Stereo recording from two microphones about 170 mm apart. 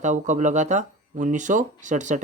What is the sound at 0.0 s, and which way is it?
Speech, 45° right (ahead or behind).